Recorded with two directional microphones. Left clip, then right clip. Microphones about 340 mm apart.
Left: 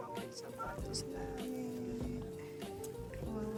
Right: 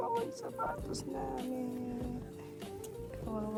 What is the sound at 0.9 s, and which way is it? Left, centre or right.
Speech, centre.